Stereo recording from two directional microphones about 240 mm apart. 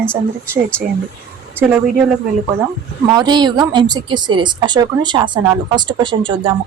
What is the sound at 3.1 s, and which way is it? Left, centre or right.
A woman's voice, centre.